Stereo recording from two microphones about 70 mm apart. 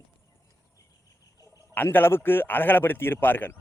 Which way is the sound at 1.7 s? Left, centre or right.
Left.